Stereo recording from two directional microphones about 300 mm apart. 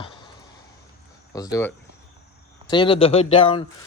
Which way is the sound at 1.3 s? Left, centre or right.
Centre.